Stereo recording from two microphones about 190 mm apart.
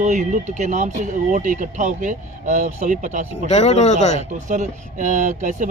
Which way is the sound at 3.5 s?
35° left (ahead or behind).